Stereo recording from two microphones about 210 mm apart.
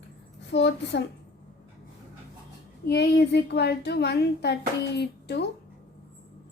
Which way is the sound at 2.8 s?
50° left (ahead or behind).